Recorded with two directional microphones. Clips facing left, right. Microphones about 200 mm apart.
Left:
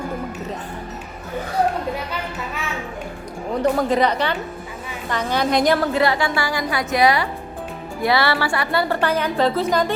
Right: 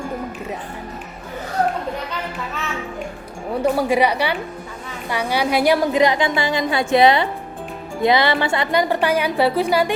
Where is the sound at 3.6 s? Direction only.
10° right (ahead or behind).